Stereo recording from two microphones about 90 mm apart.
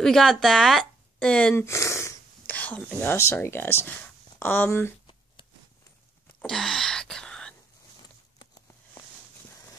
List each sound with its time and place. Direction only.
0.0 s speech: 5° left (ahead or behind)
1.5 s speech: 30° left (ahead or behind)
2.4 s speech: 15° left (ahead or behind)
3.2 s speech: 30° left (ahead or behind)
6.4 s a sound: 5° left (ahead or behind)